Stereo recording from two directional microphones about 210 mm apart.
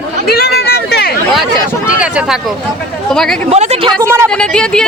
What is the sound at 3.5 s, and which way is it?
Speech, 30° right (ahead or behind).